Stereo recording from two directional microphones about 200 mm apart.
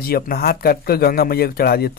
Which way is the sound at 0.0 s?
50° left (ahead or behind).